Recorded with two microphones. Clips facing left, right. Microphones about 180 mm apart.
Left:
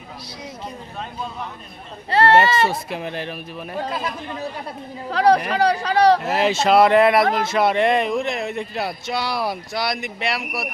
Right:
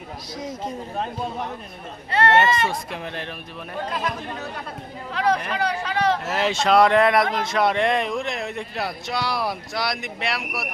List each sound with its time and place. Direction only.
0.4 s speech: 45° right (ahead or behind)
2.0 s speech: 35° left (ahead or behind)
2.6 s speech: 5° left (ahead or behind)
5.1 s speech: 35° left (ahead or behind)
6.3 s speech: centre (ahead or behind)